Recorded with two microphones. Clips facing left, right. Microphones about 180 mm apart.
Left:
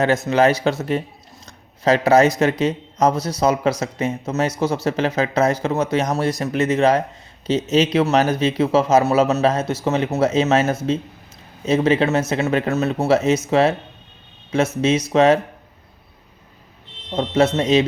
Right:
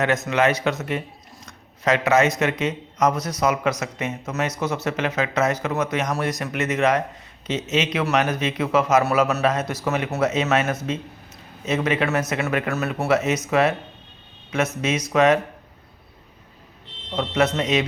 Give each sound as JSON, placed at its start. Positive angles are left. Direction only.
{"t": 0.0, "sound": "speech", "side_deg": 30}
{"t": 17.2, "sound": "speech", "side_deg": 30}